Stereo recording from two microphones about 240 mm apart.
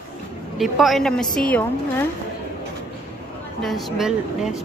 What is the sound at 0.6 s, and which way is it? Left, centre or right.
Speech, centre.